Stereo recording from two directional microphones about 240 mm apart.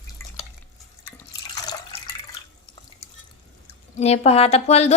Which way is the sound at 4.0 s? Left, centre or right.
Left.